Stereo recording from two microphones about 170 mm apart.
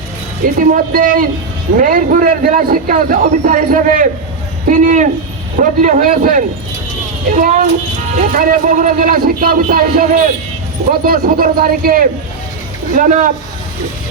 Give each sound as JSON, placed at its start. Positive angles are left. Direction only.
{"t": 0.4, "sound": "a man's voice", "side_deg": -55}